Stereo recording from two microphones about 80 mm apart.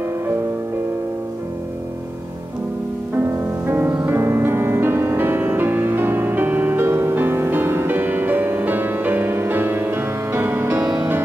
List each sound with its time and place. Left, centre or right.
3.2 s music: right
10.8 s music: centre